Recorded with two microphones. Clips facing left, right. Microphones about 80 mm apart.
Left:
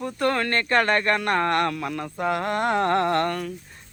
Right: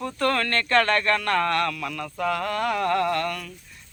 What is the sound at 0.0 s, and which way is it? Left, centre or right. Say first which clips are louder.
Speech: left 1 dB; left.